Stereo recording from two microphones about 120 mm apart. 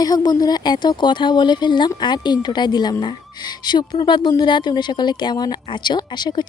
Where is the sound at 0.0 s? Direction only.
35° left (ahead or behind).